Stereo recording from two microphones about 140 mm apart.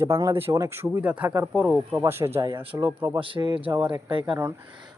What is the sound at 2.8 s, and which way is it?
Speech, 20° right (ahead or behind).